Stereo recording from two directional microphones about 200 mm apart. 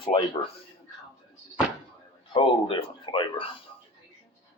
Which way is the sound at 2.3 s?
25° left (ahead or behind).